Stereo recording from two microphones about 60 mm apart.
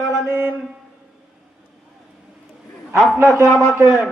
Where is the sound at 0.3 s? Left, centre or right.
Right.